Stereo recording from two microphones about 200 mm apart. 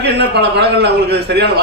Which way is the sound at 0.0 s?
55° right (ahead or behind).